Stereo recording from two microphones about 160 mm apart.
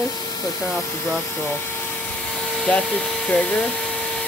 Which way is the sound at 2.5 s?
5° left (ahead or behind).